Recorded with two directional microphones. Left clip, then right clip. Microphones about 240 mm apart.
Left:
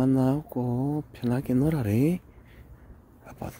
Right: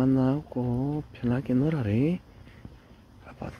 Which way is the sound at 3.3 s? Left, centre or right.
Centre.